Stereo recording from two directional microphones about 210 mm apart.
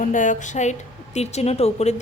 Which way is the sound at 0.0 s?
35° left (ahead or behind).